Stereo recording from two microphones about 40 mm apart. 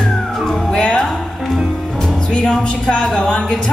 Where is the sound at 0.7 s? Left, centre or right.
Left.